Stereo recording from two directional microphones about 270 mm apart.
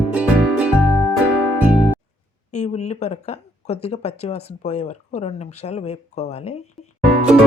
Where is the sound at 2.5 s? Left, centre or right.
Left.